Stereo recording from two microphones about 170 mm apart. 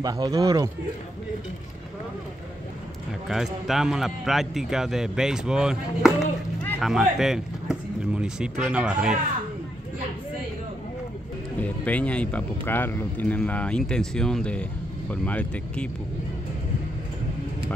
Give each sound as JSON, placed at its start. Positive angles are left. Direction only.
{"t": 0.0, "sound": "speech", "side_deg": -20}
{"t": 3.3, "sound": "speech", "side_deg": 0}
{"t": 11.6, "sound": "speech", "side_deg": 10}